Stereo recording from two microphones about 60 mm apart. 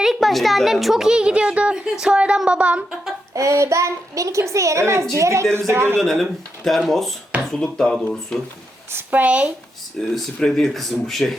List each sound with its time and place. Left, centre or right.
0.0 s a woman's voice: centre; by 2.8 s right
3.3 s a child's voice: right
6.0 s speech: centre
8.9 s a sound: right
9.1 s speech: right
10.2 s speech: centre